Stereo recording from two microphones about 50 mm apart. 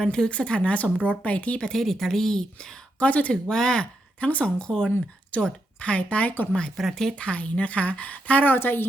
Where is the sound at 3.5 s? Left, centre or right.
Centre.